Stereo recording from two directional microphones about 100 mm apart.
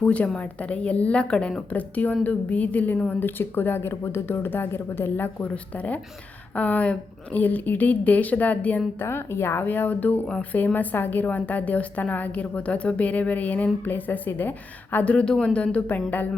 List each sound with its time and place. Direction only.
0.0 s a woman's voice: 15° left (ahead or behind)